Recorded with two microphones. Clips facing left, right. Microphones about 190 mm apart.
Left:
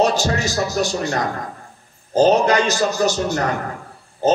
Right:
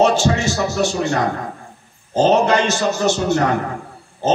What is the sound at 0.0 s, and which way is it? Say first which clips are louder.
Speech: right 3 dB; 40° left (ahead or behind).